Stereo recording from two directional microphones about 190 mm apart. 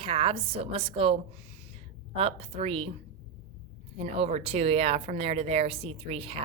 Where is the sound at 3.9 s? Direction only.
30° right (ahead or behind).